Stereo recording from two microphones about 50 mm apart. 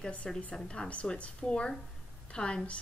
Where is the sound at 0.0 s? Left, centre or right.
Left.